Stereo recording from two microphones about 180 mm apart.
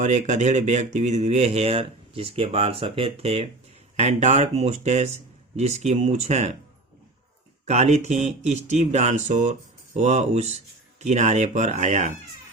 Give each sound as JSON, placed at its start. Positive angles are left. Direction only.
{"t": 0.0, "sound": "speech", "side_deg": -40}
{"t": 7.6, "sound": "speech", "side_deg": -40}